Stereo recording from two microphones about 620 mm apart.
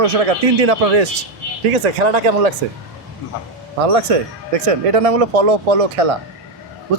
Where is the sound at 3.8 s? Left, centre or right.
Right.